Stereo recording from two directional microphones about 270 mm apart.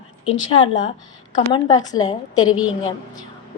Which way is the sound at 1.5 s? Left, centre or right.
Centre.